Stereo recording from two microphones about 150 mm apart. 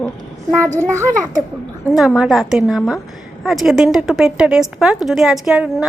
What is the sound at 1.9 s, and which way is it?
A woman's voice, 5° right (ahead or behind).